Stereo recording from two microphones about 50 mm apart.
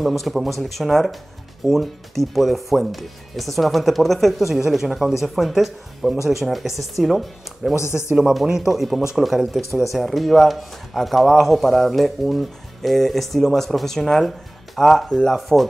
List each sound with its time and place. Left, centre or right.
0.0 s speech: centre
7.7 s speech: left
8.1 s speech: centre